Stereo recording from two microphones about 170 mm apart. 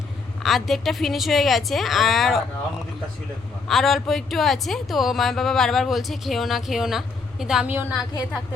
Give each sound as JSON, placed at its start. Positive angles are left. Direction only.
{"t": 0.4, "sound": "a woman's voice", "side_deg": 0}
{"t": 3.7, "sound": "a woman's voice", "side_deg": 0}